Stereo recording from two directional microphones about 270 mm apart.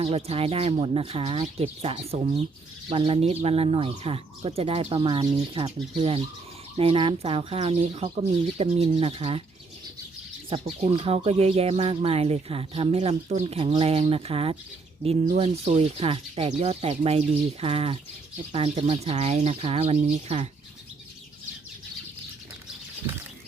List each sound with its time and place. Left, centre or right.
0.0 s speech: right
10.5 s speech: right